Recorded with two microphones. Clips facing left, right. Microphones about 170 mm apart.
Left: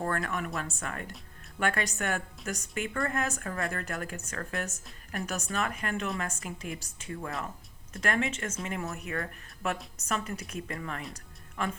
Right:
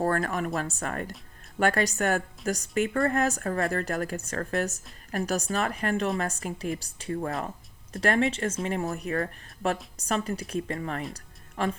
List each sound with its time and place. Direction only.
0.0 s speech: 35° right (ahead or behind)
11.1 s music: 35° right (ahead or behind)